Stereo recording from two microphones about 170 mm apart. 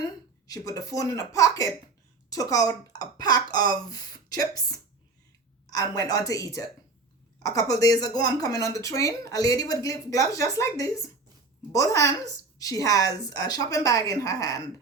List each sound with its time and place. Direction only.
0.4 s speech: 20° left (ahead or behind)